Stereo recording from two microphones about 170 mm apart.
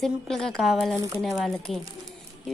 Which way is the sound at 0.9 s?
15° right (ahead or behind).